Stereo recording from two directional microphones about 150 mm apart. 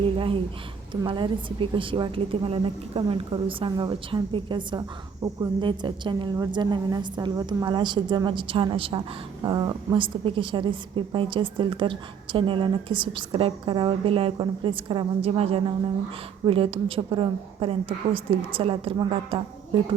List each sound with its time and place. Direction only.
1.0 s a woman's voice: 30° right (ahead or behind)